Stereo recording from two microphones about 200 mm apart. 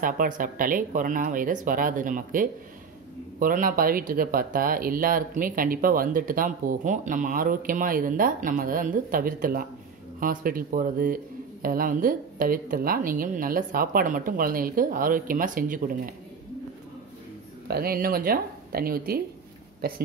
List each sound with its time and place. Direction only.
0.0 s speech: 40° right (ahead or behind)
17.6 s speech: 50° right (ahead or behind)